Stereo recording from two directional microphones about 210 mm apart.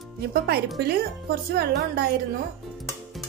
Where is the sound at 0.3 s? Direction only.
50° right (ahead or behind).